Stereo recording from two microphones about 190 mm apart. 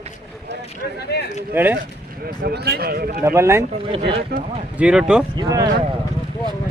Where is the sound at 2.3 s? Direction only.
55° right (ahead or behind).